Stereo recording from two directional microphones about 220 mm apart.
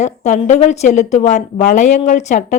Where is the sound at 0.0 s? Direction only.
30° left (ahead or behind).